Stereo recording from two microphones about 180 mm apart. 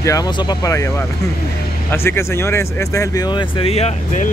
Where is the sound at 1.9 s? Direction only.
15° left (ahead or behind).